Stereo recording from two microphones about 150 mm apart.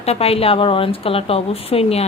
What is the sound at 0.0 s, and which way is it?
A woman's voice, 45° left (ahead or behind).